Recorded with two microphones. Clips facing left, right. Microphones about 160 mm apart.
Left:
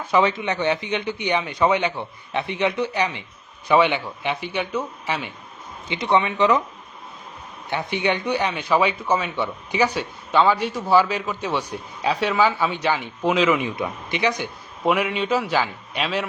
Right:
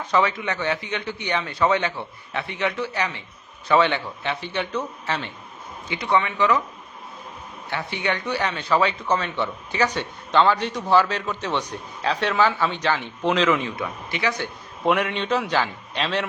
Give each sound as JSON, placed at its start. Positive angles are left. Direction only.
{"t": 0.1, "sound": "speech", "side_deg": 20}
{"t": 7.7, "sound": "speech", "side_deg": 20}
{"t": 14.8, "sound": "a man's voice", "side_deg": 5}